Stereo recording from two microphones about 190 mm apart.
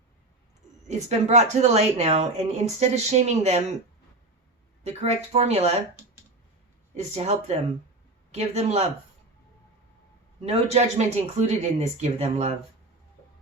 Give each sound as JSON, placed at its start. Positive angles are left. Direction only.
{"t": 0.9, "sound": "speech", "side_deg": -35}
{"t": 4.8, "sound": "speech", "side_deg": -35}
{"t": 6.9, "sound": "speech", "side_deg": -35}
{"t": 10.4, "sound": "speech", "side_deg": -35}